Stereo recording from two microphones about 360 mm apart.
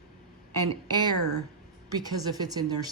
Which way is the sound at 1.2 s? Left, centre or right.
Right.